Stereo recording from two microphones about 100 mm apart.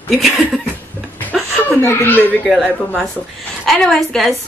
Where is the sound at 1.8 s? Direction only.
20° left (ahead or behind).